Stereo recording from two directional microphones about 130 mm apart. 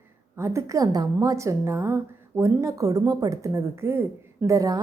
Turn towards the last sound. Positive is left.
turn(degrees=-25)  # may be behind; listen again after turning